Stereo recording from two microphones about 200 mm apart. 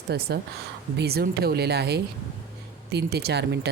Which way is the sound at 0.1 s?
55° right (ahead or behind).